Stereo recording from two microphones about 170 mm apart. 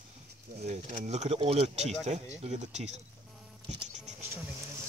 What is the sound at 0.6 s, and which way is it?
Speech, 40° right (ahead or behind).